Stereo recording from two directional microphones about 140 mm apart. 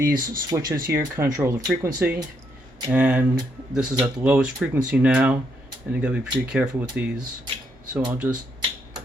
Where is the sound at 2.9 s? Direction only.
10° right (ahead or behind).